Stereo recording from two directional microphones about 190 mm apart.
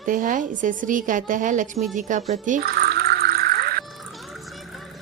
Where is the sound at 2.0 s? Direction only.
40° right (ahead or behind).